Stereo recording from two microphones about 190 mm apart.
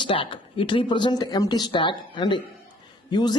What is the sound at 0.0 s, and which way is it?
A woman's voice, 25° left (ahead or behind).